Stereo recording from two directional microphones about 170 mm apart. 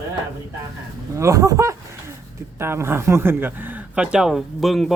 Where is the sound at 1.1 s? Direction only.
20° right (ahead or behind).